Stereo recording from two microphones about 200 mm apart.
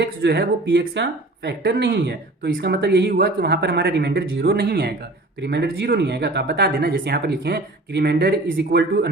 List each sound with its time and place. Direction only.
0.0 s speech: 55° right (ahead or behind)